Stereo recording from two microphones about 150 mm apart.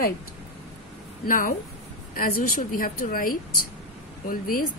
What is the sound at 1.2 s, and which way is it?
A woman's voice, 70° left (ahead or behind).